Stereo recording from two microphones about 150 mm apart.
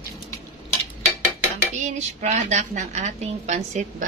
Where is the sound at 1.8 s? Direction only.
50° right (ahead or behind).